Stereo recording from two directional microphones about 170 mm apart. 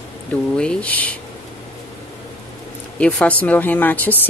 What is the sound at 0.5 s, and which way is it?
Speech, 5° left (ahead or behind).